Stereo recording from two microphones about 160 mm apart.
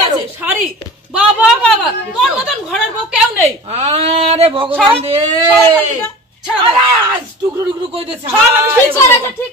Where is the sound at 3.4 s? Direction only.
40° right (ahead or behind).